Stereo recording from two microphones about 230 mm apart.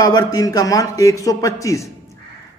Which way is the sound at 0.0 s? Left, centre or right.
Centre.